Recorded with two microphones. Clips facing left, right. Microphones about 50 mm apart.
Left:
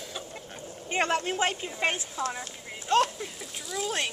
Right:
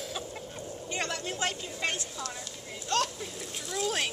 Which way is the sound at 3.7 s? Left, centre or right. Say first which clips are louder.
Even; centre.